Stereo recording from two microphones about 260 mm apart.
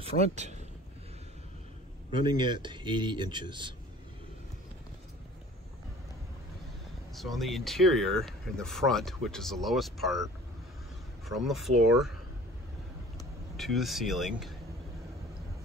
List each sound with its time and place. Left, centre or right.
0.0 s speech: right
2.1 s a man's voice: centre
7.2 s speech: centre
11.2 s speech: centre
13.6 s speech: centre